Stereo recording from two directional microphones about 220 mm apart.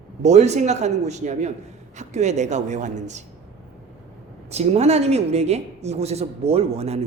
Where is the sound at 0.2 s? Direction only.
30° right (ahead or behind).